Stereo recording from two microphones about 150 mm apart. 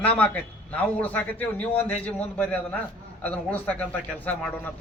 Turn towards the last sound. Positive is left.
turn(degrees=10)  # may be behind; listen again after turning